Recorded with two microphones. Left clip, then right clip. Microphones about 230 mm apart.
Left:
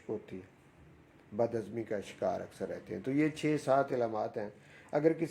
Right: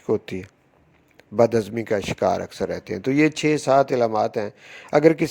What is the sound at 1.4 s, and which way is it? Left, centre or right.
Speech, right.